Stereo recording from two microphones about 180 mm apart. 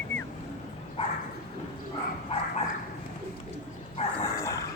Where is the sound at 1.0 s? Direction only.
30° left (ahead or behind).